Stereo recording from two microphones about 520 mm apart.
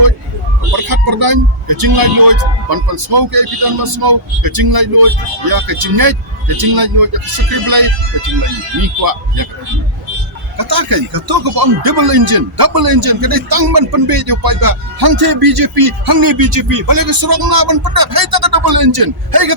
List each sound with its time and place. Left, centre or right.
0.9 s speech: right
8.8 s speech: right
10.6 s speech: right